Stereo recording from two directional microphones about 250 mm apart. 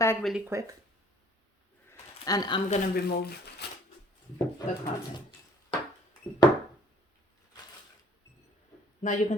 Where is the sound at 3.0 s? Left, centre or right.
Left.